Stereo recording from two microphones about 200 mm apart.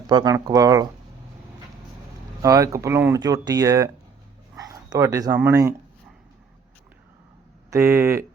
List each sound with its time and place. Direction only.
0.1 s speech: 20° right (ahead or behind)
2.4 s speech: 15° right (ahead or behind)
7.7 s speech: 10° right (ahead or behind)